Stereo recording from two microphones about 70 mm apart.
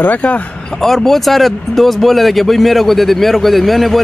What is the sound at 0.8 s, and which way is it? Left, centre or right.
Speech, centre.